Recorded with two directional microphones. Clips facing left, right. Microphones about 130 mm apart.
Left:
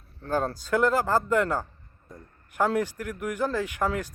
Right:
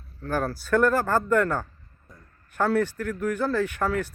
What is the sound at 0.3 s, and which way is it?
A man's voice, 20° left (ahead or behind).